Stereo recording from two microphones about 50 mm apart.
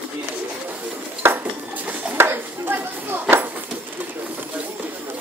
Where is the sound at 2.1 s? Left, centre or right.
Right.